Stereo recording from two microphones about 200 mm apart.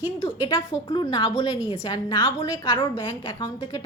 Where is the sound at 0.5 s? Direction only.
15° left (ahead or behind).